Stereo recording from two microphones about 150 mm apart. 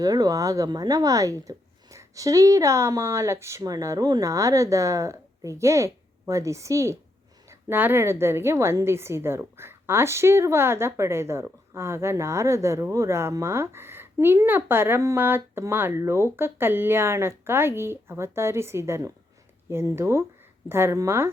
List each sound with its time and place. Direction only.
0.0 s a woman's voice: 25° right (ahead or behind)